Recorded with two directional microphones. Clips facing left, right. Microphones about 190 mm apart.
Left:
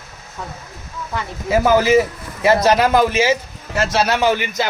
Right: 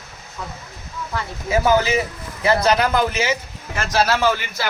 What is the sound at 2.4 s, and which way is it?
A man's voice, 25° left (ahead or behind).